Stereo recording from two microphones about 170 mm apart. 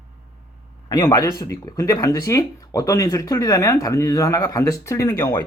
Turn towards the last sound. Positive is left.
turn(degrees=25)  # may be behind; listen again after turning